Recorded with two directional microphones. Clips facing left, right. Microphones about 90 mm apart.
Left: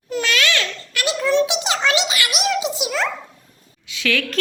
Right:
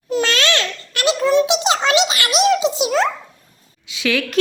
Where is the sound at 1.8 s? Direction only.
20° right (ahead or behind).